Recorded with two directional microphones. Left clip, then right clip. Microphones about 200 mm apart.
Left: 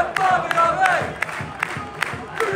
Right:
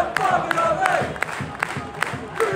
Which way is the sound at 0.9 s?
40° right (ahead or behind).